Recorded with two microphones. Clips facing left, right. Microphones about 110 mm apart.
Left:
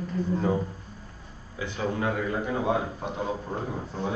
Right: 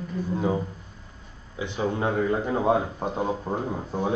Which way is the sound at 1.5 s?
20° right (ahead or behind).